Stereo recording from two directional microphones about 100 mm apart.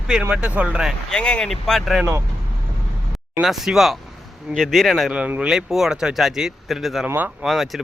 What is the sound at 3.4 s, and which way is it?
Speech, 5° right (ahead or behind).